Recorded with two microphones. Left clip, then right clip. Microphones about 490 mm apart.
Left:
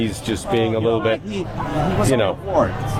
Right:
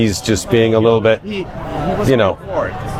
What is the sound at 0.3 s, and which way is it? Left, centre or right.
Speech, right.